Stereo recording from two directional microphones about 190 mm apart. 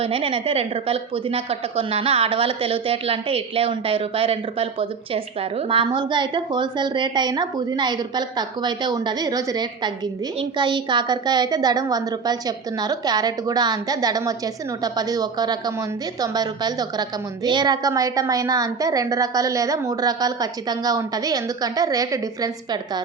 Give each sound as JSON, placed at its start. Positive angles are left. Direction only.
{"t": 0.0, "sound": "a woman's voice", "side_deg": -30}